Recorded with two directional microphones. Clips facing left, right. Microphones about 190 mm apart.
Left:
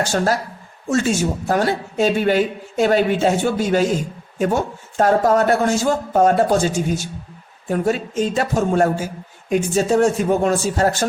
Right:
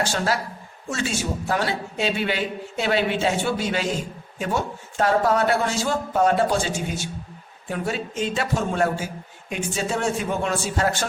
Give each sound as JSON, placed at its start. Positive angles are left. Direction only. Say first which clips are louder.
{"t": 0.0, "sound": "a man's voice", "louder": "left 5 dB", "side_deg": 45}